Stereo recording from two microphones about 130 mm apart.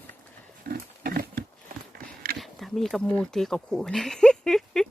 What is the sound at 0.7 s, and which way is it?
Pig, 90° right.